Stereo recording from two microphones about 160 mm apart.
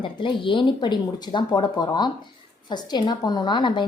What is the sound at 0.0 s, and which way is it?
A woman's voice, 30° left (ahead or behind).